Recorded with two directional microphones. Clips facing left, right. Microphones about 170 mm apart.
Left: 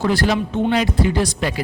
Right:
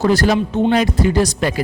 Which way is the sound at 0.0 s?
40° right (ahead or behind).